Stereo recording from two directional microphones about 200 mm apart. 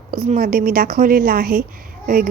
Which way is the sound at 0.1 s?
45° right (ahead or behind).